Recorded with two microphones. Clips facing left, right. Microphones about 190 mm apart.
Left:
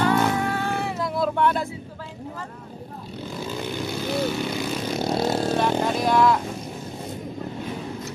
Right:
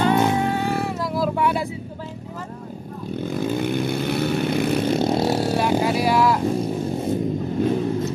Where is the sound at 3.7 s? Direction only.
60° right (ahead or behind).